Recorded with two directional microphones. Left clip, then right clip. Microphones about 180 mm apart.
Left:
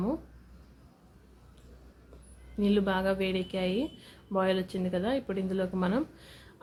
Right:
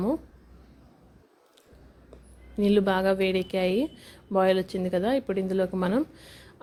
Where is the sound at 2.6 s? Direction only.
35° right (ahead or behind).